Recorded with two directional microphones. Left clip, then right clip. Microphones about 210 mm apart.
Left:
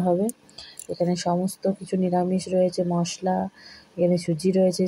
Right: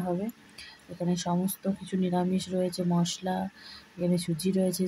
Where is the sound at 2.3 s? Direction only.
10° right (ahead or behind).